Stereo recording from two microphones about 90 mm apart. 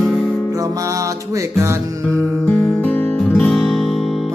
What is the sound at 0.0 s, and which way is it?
Music, 5° left (ahead or behind).